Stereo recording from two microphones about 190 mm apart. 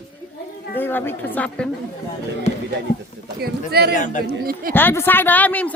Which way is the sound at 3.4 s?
55° right (ahead or behind).